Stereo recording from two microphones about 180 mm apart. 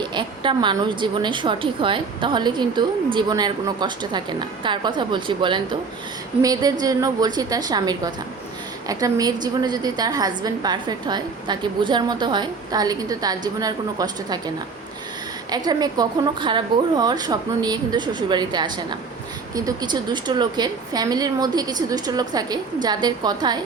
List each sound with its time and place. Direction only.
0.0 s a woman's voice: 25° right (ahead or behind)